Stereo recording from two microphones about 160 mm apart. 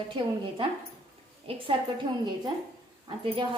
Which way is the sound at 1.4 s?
30° right (ahead or behind).